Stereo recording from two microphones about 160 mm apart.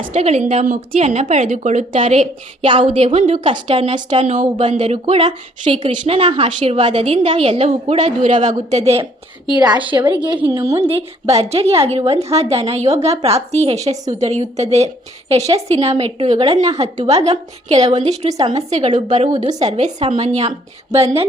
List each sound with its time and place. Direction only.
0.1 s a woman's voice: 40° right (ahead or behind)
1.9 s a woman's voice: 40° right (ahead or behind)
9.8 s a woman's voice: 30° right (ahead or behind)
10.5 s a woman's voice: 20° right (ahead or behind)
10.8 s a woman's voice: 40° right (ahead or behind)
19.3 s a woman's voice: 25° right (ahead or behind)
19.6 s a woman's voice: 40° right (ahead or behind)